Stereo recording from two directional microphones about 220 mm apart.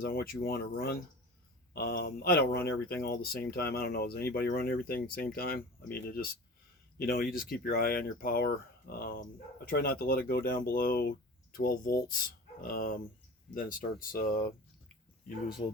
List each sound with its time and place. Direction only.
0.0 s speech: 45° left (ahead or behind)